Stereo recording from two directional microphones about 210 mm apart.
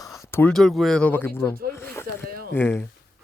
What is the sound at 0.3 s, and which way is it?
Speech, 10° left (ahead or behind).